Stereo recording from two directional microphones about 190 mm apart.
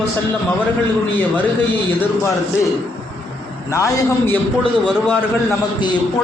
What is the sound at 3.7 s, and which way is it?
Speech, 15° left (ahead or behind).